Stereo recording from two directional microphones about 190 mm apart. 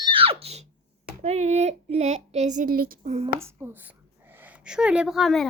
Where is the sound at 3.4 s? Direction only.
15° right (ahead or behind).